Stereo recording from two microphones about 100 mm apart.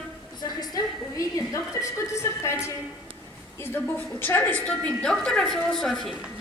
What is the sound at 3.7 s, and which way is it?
A woman's voice, 20° left (ahead or behind).